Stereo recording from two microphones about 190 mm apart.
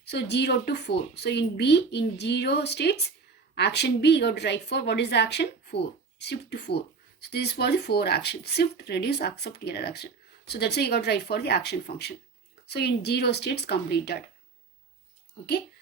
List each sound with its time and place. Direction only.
0.0 s speech: 65° left (ahead or behind)